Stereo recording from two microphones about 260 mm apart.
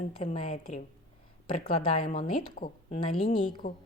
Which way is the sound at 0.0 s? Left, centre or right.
Left.